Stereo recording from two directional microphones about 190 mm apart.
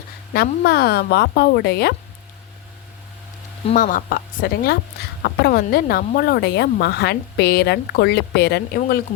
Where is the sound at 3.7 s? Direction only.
45° left (ahead or behind).